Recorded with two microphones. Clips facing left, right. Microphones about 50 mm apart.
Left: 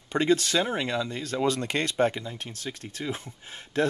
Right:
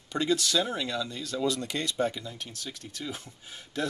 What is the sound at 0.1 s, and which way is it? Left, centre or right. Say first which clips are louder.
Speech: left 3 dB; left.